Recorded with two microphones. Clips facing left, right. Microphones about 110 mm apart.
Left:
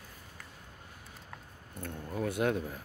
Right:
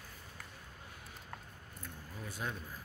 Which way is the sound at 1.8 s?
65° left (ahead or behind).